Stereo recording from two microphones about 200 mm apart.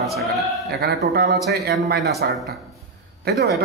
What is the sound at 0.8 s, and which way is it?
Speech, 55° right (ahead or behind).